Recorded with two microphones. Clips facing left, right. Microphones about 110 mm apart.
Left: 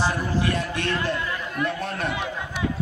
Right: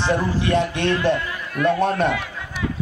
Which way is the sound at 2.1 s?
20° left (ahead or behind).